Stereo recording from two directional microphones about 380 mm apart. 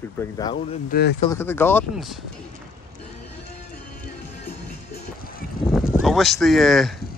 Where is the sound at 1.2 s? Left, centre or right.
Centre.